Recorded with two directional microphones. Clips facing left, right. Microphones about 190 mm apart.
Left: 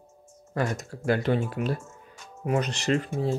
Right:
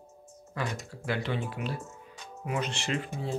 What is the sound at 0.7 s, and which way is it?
Speech, 45° left (ahead or behind).